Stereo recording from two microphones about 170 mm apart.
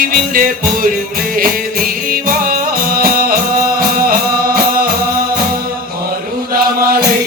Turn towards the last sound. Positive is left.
turn(degrees=-60)  # may be behind; listen again after turning